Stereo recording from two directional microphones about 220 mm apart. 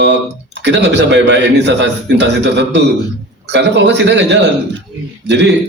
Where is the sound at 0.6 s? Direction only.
55° right (ahead or behind).